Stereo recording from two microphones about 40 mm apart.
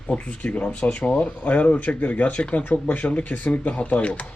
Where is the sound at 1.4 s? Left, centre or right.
Left.